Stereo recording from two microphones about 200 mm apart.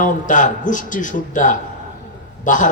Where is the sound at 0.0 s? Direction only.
40° left (ahead or behind).